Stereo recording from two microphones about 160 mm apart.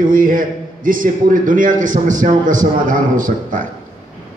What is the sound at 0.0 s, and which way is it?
A man's voice, 60° right (ahead or behind).